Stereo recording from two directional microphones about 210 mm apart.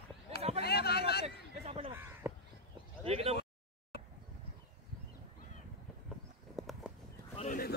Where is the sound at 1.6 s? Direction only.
30° right (ahead or behind).